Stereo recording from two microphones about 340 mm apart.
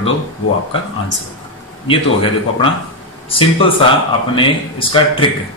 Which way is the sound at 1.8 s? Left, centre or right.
Centre.